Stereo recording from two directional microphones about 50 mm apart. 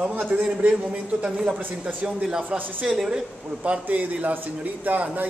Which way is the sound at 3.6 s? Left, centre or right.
Right.